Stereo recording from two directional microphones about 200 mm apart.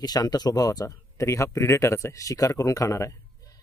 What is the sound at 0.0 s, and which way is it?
Speech, 20° left (ahead or behind).